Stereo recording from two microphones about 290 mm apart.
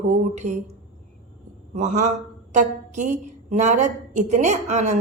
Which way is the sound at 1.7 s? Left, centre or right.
Right.